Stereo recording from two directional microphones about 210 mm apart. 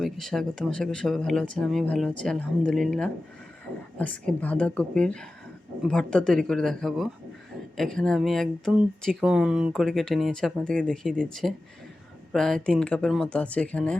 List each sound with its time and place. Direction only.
0.0 s speech: centre (ahead or behind)